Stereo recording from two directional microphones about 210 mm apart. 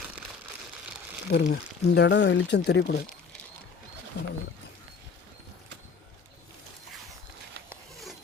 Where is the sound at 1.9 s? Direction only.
55° left (ahead or behind).